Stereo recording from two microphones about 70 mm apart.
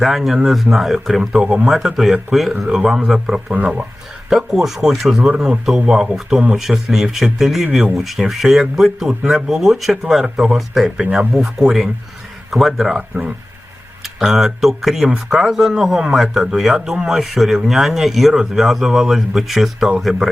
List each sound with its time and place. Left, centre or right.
0.0 s speech: centre
3.5 s speech: centre
4.3 s speech: centre
14.3 s speech: centre
20.1 s speech: centre